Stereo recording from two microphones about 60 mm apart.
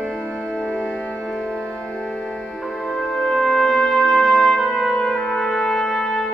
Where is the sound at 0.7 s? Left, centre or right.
Right.